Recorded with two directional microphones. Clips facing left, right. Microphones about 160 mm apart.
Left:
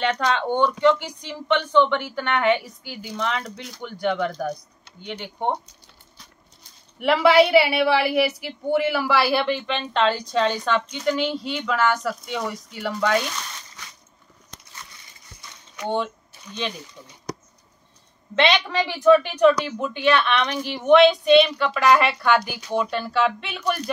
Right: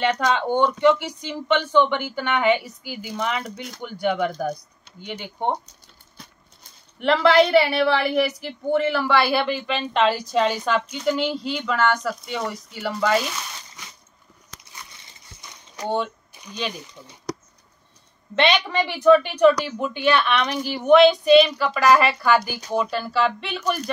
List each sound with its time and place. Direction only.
0.0 s a woman's voice: 5° right (ahead or behind)
7.0 s a woman's voice: 5° left (ahead or behind)
15.8 s speech: 35° right (ahead or behind)
18.3 s a woman's voice: centre (ahead or behind)